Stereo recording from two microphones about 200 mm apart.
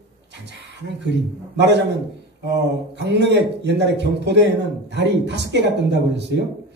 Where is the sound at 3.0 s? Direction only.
60° right (ahead or behind).